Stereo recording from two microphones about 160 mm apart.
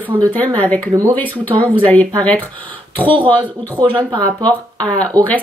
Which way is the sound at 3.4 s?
30° right (ahead or behind).